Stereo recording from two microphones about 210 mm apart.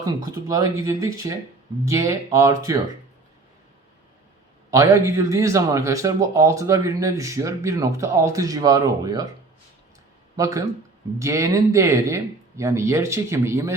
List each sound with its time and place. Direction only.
0.0 s a man's voice: 15° right (ahead or behind)
4.7 s a man's voice: 15° right (ahead or behind)
10.3 s a man's voice: 15° right (ahead or behind)